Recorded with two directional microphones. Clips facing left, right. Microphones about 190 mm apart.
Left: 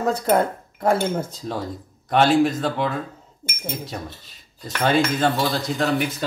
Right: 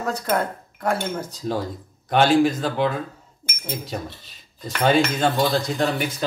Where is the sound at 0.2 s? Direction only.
25° left (ahead or behind).